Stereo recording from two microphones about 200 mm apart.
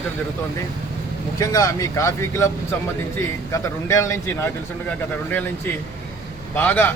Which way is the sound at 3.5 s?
15° left (ahead or behind).